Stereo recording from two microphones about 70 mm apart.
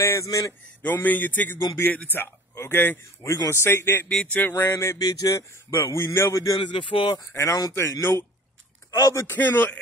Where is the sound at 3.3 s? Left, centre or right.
Left.